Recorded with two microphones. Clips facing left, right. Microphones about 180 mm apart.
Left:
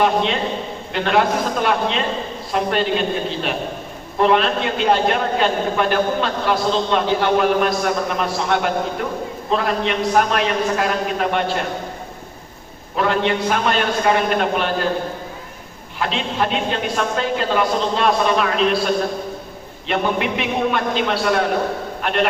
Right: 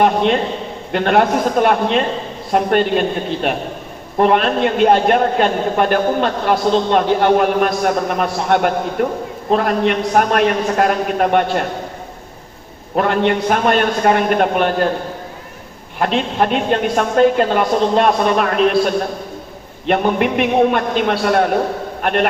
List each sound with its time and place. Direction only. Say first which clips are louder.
0.0 s a man's voice: right 4 dB; 50° right (ahead or behind)
13.0 s a man's voice: right 3 dB; 50° right (ahead or behind)
16.0 s a man's voice: right 5 dB; 50° right (ahead or behind)
19.9 s a man's voice: right 5 dB; 50° right (ahead or behind)